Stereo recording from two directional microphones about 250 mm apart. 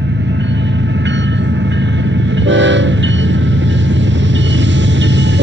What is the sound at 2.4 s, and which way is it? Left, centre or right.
Train, right.